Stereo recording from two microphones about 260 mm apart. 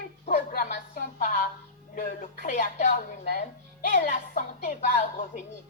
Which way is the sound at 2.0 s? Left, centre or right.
Left.